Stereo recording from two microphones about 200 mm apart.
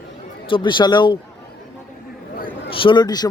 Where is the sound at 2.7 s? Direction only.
25° left (ahead or behind).